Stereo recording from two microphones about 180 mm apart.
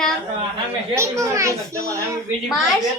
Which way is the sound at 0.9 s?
15° right (ahead or behind).